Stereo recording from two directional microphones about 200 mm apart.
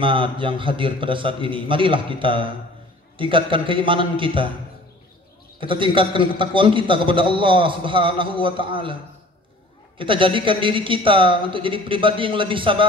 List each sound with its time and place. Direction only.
0.0 s a man's voice: 25° right (ahead or behind)
5.6 s a man's voice: 25° right (ahead or behind)
9.9 s a man's voice: 25° right (ahead or behind)